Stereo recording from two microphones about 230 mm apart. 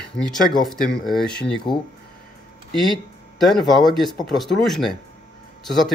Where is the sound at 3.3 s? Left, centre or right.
Centre.